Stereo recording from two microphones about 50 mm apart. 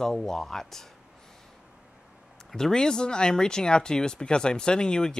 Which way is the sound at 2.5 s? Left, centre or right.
Centre.